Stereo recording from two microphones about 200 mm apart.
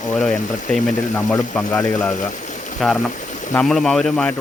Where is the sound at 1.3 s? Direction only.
5° left (ahead or behind).